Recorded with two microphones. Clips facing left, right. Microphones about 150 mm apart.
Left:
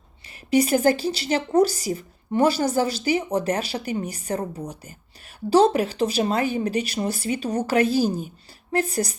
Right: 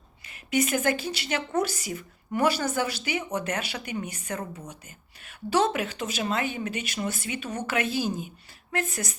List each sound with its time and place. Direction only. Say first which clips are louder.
0.3 s a woman's voice: left 6 dB; 35° left (ahead or behind)